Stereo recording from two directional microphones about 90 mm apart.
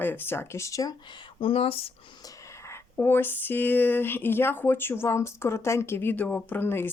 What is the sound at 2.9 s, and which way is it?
Speech, 25° left (ahead or behind).